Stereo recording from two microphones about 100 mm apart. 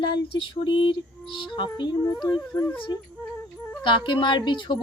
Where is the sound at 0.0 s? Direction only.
55° left (ahead or behind).